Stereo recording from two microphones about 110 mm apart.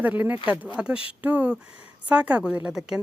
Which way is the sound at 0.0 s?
15° right (ahead or behind).